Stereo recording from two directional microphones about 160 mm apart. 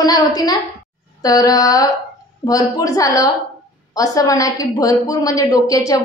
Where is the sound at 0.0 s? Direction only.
25° left (ahead or behind).